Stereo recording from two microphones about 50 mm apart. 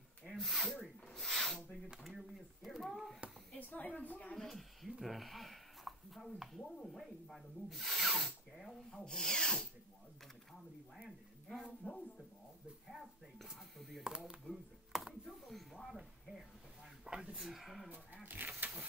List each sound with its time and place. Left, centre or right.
0.3 s speech: centre
1.0 s a sound: centre
3.5 s speech: left
4.4 s speech: centre
9.0 s rub: centre
11.5 s speech: left
12.8 s speech: centre
14.0 s speech: centre
14.9 s a sound: centre
15.4 s speech: centre
17.0 s a sound: centre
17.4 s speech: centre
17.8 s speech: right
18.2 s a sound: right